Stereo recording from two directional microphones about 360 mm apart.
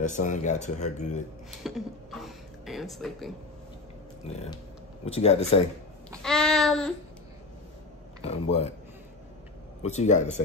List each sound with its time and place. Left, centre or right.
0.0 s speech: left
1.6 s speech: centre
5.0 s speech: centre
6.0 s a sound: centre
8.2 s speech: centre
9.8 s speech: centre